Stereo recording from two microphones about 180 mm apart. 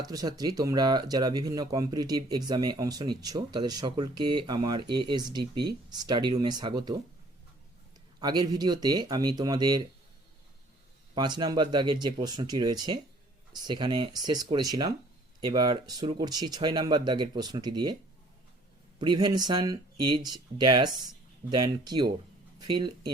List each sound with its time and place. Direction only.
0.0 s speech: 20° right (ahead or behind)
8.2 s speech: 25° right (ahead or behind)
11.1 s speech: 25° right (ahead or behind)
18.9 s speech: 25° right (ahead or behind)